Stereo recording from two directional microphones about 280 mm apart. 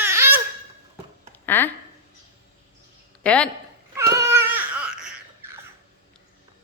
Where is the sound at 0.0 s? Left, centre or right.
Centre.